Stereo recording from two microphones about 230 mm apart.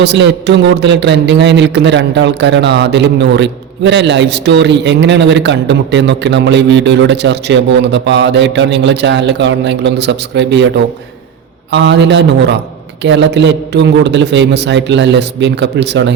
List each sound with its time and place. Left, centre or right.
0.0 s a man's voice: right
11.7 s a man's voice: right